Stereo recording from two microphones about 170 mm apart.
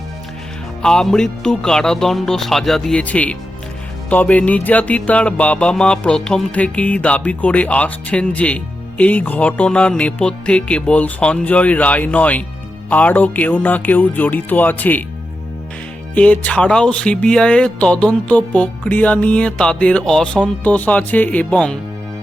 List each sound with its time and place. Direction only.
0.8 s speech: 5° left (ahead or behind)
4.1 s music: 10° left (ahead or behind)
16.1 s music: 10° left (ahead or behind)